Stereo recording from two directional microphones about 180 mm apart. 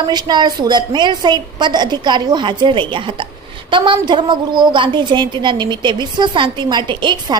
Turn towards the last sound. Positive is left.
turn(degrees=-25)  # may be behind; listen again after turning